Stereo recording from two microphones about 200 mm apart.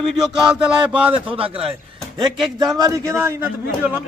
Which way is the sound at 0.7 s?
5° right (ahead or behind).